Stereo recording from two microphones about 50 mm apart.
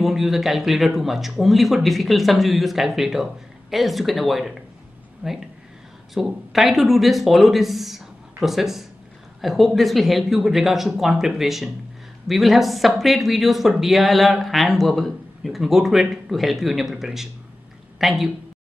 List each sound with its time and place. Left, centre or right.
0.0 s speech: centre
5.2 s speech: right
6.1 s a woman's voice: centre